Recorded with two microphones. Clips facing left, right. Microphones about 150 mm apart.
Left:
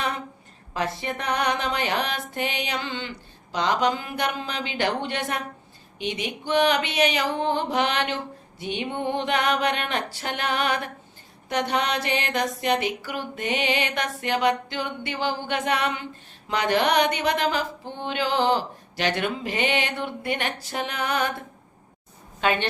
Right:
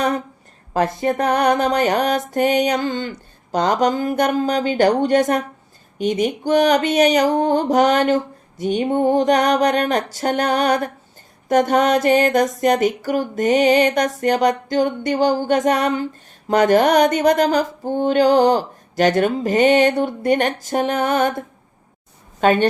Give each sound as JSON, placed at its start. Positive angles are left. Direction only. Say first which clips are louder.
{"t": 0.7, "sound": "mantra", "louder": "right 9 dB", "side_deg": -45}
{"t": 22.4, "sound": "speech", "louder": "right 9 dB", "side_deg": -45}